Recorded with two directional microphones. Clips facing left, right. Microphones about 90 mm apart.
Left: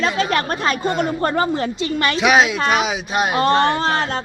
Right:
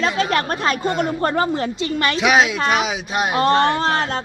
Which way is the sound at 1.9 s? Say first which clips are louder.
Left 1 dB; 20° left (ahead or behind).